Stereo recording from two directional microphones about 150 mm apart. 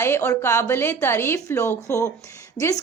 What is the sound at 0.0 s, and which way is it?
A woman's voice, 15° left (ahead or behind).